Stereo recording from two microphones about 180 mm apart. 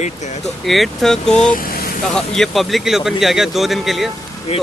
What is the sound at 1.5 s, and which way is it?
Speech, 55° left (ahead or behind).